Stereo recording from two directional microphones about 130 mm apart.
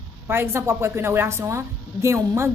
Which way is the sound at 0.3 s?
20° right (ahead or behind).